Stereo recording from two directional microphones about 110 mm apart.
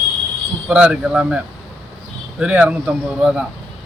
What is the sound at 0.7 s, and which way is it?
Speech, 10° right (ahead or behind).